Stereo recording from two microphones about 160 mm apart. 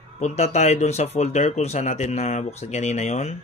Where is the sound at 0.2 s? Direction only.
45° left (ahead or behind).